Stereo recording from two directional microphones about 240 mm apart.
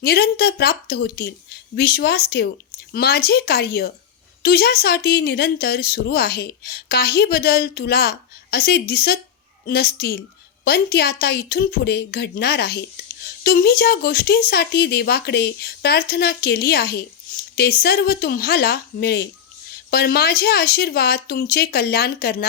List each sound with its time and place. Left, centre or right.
0.0 s speech: left